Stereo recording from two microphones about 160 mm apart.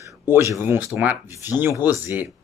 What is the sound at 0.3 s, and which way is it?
Speech, 15° right (ahead or behind).